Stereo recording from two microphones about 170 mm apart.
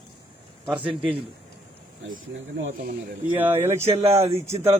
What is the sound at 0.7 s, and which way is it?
Speech, 10° right (ahead or behind).